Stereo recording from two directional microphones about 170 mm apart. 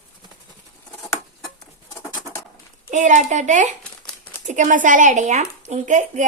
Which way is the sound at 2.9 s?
45° right (ahead or behind).